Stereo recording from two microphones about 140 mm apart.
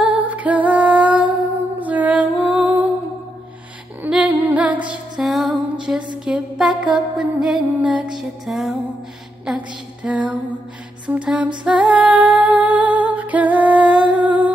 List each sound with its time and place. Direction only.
0.0 s music: 10° right (ahead or behind)
4.0 s music: 10° right (ahead or behind)
6.2 s a sound: 5° right (ahead or behind)
6.8 s music: 10° right (ahead or behind)
9.5 s a sound: 5° right (ahead or behind)
10.0 s music: 10° right (ahead or behind)